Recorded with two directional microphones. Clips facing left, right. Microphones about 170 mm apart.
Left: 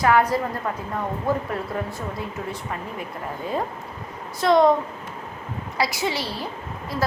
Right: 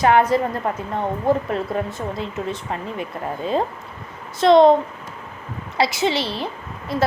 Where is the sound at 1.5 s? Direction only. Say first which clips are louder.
Right 4 dB; 20° right (ahead or behind).